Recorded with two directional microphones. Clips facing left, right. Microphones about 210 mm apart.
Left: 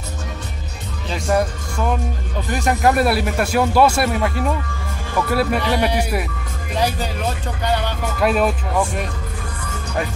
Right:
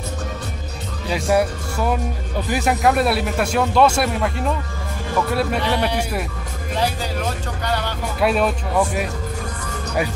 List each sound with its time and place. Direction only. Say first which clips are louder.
1.0 s speech: right 1 dB; 10° right (ahead or behind); by 6.2 s 10° left (ahead or behind)
8.2 s speech: left 1 dB; centre (ahead or behind)